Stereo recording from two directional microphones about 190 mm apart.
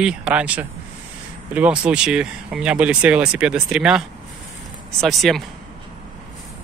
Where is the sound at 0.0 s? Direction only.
5° right (ahead or behind).